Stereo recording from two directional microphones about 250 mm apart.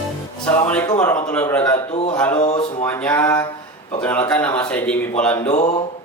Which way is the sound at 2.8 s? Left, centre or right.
Centre.